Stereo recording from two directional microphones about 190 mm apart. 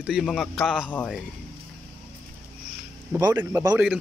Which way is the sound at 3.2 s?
15° right (ahead or behind).